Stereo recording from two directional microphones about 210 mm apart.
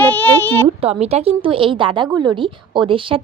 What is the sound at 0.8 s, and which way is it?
A woman's voice, 30° right (ahead or behind).